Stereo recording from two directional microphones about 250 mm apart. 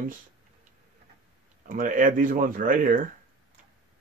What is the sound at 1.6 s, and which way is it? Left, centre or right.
Speech, right.